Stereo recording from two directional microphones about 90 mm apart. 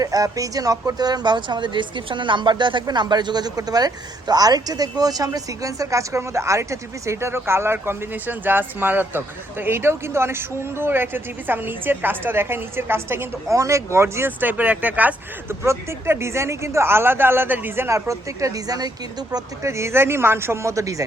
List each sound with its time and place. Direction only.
0.0 s speech: 40° right (ahead or behind); by 15.5 s 20° right (ahead or behind)
15.6 s speech: 30° right (ahead or behind)
19.6 s speech: 30° right (ahead or behind)